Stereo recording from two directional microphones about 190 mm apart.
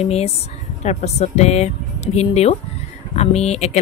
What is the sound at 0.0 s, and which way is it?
Speech, 35° left (ahead or behind).